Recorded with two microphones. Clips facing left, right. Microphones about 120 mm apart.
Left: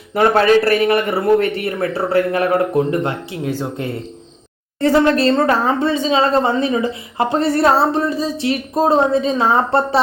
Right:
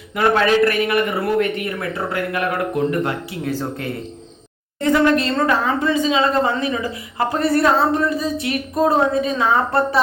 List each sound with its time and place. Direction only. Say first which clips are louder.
0.1 s a man's voice: left 4 dB; 35° left (ahead or behind)
4.8 s speech: left 3 dB; 30° left (ahead or behind)